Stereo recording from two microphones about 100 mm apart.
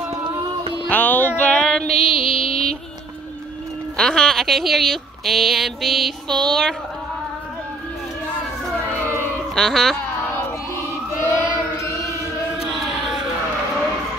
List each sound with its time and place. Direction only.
0.8 s music: 20° left (ahead or behind)
3.9 s speech: 5° left (ahead or behind)
9.6 s speech: 5° left (ahead or behind)
11.3 s chant: 30° left (ahead or behind)
12.5 s a sound: centre (ahead or behind)